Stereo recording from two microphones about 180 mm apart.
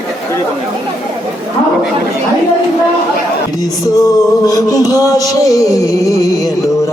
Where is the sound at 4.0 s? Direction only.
20° left (ahead or behind).